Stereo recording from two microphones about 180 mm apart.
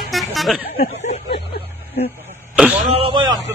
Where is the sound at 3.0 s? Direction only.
25° right (ahead or behind).